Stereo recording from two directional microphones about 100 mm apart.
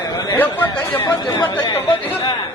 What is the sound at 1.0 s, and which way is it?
Speech, 40° left (ahead or behind).